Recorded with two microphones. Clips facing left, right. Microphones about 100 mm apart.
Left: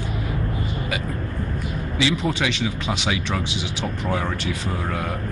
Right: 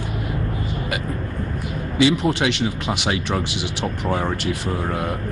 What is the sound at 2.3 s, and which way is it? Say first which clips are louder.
Speech: right 3 dB; 65° right (ahead or behind).